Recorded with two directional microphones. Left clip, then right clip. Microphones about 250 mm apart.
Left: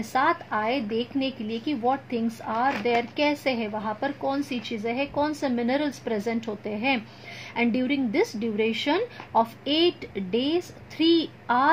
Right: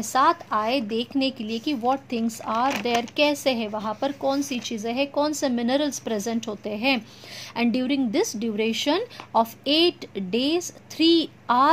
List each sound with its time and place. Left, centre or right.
0.0 s a woman's voice: right